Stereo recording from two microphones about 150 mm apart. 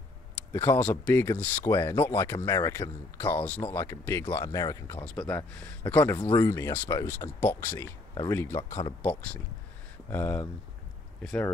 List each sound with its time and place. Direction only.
0.5 s speech: 15° left (ahead or behind)
5.3 s speech: 10° left (ahead or behind)
8.1 s speech: 25° left (ahead or behind)
10.0 s speech: 15° left (ahead or behind)